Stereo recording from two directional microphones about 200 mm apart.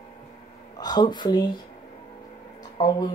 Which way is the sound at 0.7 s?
20° left (ahead or behind).